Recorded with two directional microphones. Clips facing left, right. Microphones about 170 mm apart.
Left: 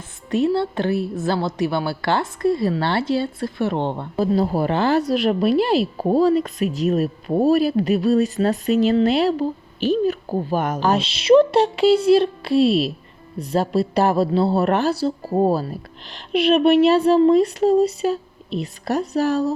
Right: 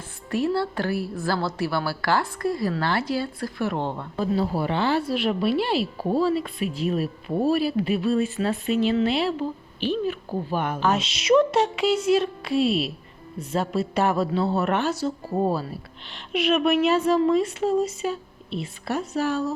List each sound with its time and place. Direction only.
0.3 s a woman's voice: 20° left (ahead or behind); by 19.5 s 35° left (ahead or behind)